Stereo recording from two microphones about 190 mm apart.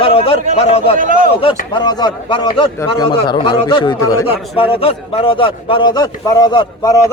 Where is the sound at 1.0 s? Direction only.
45° right (ahead or behind).